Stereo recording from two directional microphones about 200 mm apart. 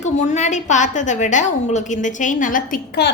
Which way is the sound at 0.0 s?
35° left (ahead or behind).